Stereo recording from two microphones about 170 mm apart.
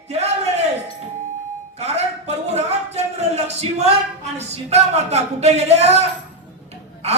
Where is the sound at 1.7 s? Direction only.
40° right (ahead or behind).